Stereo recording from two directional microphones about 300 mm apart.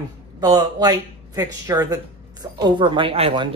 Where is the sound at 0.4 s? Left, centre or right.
Centre.